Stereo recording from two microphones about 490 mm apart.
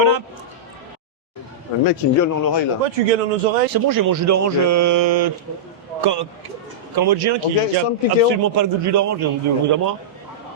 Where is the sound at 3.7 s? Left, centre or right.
Right.